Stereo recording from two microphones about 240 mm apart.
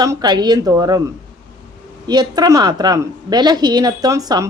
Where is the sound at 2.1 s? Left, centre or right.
Centre.